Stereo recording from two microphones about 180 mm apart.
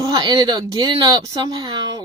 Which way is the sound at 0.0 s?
25° right (ahead or behind).